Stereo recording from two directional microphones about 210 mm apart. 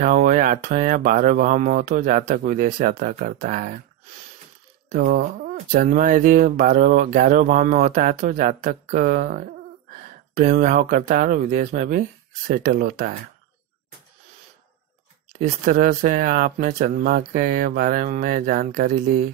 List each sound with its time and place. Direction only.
0.0 s speech: 40° right (ahead or behind)
4.9 s speech: 45° right (ahead or behind)
15.3 s speech: 40° right (ahead or behind)